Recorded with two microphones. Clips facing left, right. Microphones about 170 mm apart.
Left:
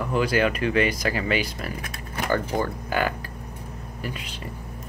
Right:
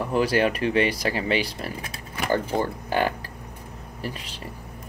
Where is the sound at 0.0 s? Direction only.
35° right (ahead or behind).